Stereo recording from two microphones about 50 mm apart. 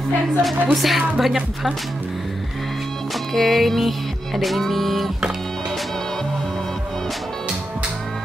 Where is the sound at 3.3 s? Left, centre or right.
Centre.